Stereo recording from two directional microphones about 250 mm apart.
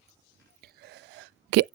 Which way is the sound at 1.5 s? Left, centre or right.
Right.